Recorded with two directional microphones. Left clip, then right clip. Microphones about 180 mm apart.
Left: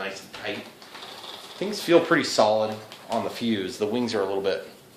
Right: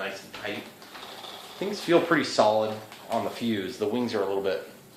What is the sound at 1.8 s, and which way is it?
Speech, 40° left (ahead or behind).